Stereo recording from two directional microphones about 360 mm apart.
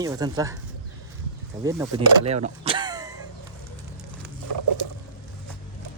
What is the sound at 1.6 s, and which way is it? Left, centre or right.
Speech, centre.